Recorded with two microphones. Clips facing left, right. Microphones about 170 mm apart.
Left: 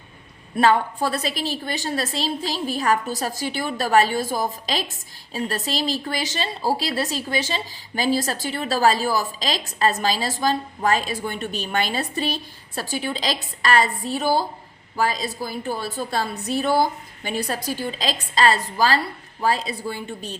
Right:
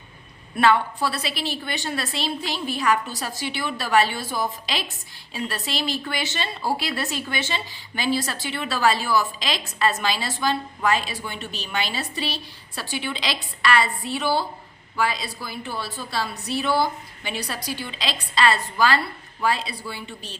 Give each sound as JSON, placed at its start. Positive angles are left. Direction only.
{"t": 0.5, "sound": "a woman's voice", "side_deg": 40}